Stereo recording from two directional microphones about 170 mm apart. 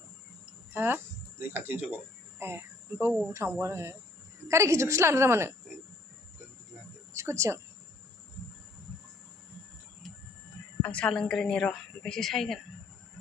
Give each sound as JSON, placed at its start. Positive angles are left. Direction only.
{"t": 0.7, "sound": "a woman's voice", "side_deg": -10}
{"t": 7.2, "sound": "speech", "side_deg": -15}
{"t": 10.8, "sound": "a woman's voice", "side_deg": 5}